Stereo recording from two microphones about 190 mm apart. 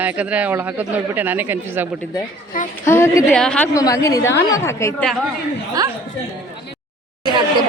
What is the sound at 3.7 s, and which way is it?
A woman's voice, 15° left (ahead or behind).